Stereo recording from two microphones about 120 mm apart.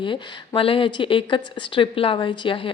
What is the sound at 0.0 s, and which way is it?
A woman's voice, 45° left (ahead or behind).